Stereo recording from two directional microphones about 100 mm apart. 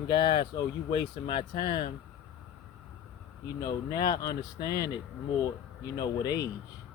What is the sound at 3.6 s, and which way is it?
Speech, 45° left (ahead or behind).